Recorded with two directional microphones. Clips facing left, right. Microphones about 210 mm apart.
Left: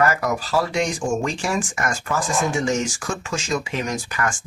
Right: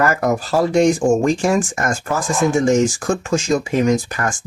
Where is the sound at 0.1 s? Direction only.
50° right (ahead or behind).